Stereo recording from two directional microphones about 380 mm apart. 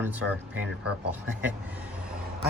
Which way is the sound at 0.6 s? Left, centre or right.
Right.